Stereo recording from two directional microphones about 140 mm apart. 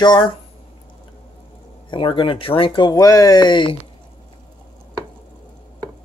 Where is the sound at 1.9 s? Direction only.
35° left (ahead or behind).